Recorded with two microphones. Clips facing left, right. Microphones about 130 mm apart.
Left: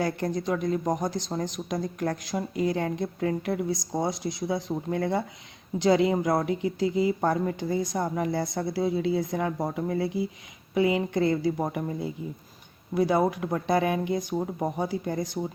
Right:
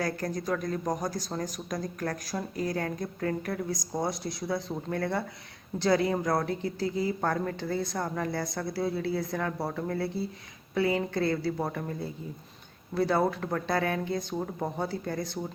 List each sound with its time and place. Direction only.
0.0 s speech: 25° left (ahead or behind)